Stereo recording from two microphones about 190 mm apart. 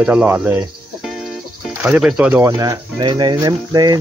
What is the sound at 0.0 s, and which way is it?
Speech, 5° right (ahead or behind).